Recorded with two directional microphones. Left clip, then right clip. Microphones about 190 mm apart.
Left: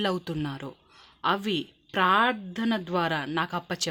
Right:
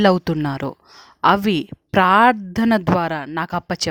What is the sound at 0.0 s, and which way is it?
Speech, 50° right (ahead or behind).